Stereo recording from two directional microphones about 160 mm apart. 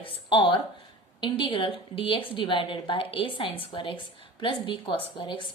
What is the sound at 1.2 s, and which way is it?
A woman's voice, 30° left (ahead or behind).